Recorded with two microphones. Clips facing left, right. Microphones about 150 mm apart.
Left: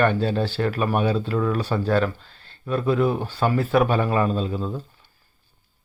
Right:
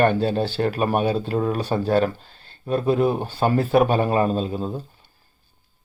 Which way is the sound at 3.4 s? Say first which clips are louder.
Right 2 dB; 35° right (ahead or behind).